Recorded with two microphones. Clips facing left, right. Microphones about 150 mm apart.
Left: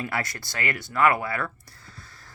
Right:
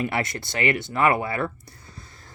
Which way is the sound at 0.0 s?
20° right (ahead or behind).